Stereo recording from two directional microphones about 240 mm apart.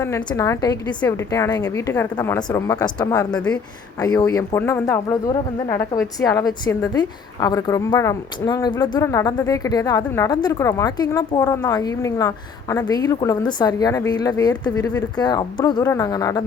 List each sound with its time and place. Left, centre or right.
0.0 s speech: centre
3.3 s speech: centre
4.0 s speech: centre